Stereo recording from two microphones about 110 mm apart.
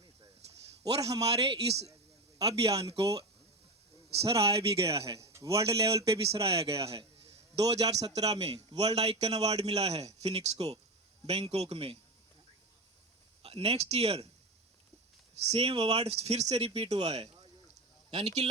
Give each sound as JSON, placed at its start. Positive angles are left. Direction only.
{"t": 0.9, "sound": "a man's voice", "side_deg": -65}
{"t": 4.2, "sound": "a man's voice", "side_deg": -60}
{"t": 5.0, "sound": "speech", "side_deg": -30}
{"t": 5.5, "sound": "a man's voice", "side_deg": -60}
{"t": 7.7, "sound": "a man's voice", "side_deg": -70}
{"t": 13.4, "sound": "a man's voice", "side_deg": -65}
{"t": 15.4, "sound": "a man's voice", "side_deg": -60}